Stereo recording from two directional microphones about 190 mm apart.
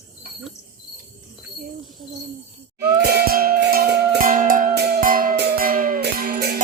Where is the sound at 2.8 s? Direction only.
55° right (ahead or behind).